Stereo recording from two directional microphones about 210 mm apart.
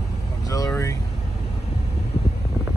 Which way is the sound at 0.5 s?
15° left (ahead or behind).